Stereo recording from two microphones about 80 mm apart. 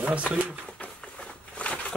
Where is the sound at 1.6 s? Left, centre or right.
Centre.